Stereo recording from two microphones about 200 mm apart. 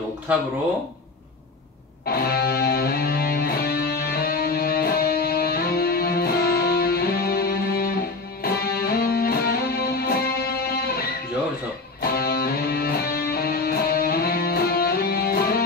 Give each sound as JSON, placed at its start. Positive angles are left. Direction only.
{"t": 0.3, "sound": "speech", "side_deg": -10}
{"t": 2.0, "sound": "music", "side_deg": 50}